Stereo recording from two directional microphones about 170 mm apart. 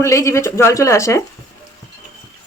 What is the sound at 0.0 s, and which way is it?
Speech, 15° left (ahead or behind).